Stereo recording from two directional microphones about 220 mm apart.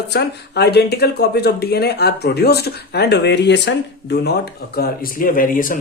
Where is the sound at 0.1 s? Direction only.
50° left (ahead or behind).